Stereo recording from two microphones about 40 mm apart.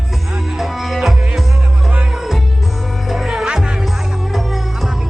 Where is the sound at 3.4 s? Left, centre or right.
Right.